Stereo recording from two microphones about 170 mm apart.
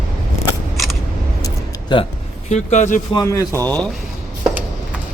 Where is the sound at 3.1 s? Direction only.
20° left (ahead or behind).